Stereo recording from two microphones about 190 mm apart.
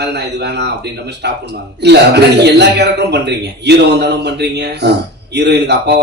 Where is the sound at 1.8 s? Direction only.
60° right (ahead or behind).